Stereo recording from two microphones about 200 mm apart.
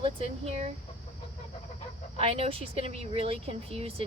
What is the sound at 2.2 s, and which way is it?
A woman's voice, 30° right (ahead or behind).